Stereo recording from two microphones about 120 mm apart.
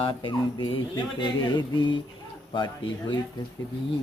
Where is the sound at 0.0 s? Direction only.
45° left (ahead or behind).